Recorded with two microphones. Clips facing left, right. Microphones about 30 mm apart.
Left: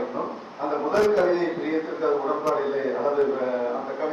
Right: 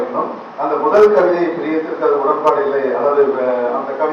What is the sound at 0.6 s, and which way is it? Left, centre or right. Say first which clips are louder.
A man's voice: right 11 dB; right.